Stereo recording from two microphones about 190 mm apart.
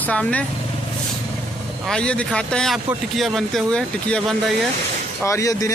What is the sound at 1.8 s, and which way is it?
Speech, 5° left (ahead or behind).